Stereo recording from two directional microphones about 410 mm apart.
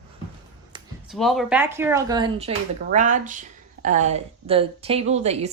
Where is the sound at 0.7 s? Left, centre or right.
Centre.